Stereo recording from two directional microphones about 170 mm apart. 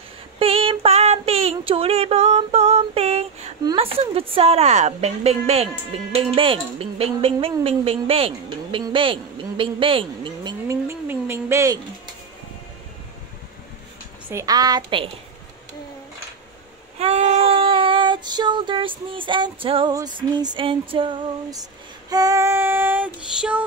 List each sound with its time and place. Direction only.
0.4 s child singing: 35° right (ahead or behind)
3.7 s speech: 35° right (ahead or behind)
10.7 s a sound: 15° right (ahead or behind)
14.3 s a woman's voice: 20° right (ahead or behind)
17.0 s child singing: 40° right (ahead or behind); by 23.6 s 10° right (ahead or behind)